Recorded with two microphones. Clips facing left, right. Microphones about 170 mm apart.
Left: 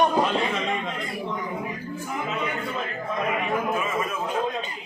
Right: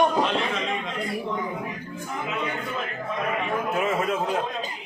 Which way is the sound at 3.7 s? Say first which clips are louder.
Right 2 dB; 70° right (ahead or behind).